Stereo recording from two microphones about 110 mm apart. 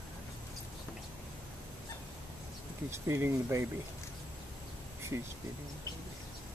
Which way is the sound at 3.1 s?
25° right (ahead or behind).